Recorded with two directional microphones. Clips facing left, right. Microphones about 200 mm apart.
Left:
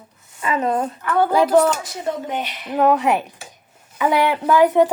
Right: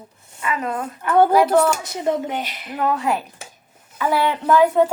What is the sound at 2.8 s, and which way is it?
A woman's voice, 20° left (ahead or behind).